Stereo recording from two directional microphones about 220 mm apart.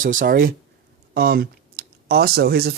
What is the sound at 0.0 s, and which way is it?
Speech, 40° right (ahead or behind).